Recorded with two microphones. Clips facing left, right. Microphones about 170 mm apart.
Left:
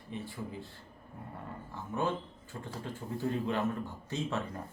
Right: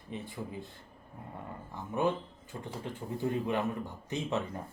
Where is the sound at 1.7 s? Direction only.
15° right (ahead or behind).